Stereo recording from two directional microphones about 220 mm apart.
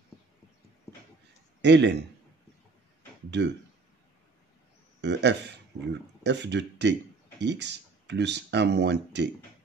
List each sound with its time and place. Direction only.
1.6 s speech: 50° right (ahead or behind)
3.3 s speech: 50° right (ahead or behind)
5.0 s speech: 50° right (ahead or behind)